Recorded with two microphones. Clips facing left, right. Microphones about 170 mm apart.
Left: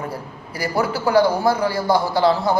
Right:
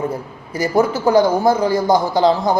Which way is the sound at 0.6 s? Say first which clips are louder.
Right 5 dB; 20° right (ahead or behind).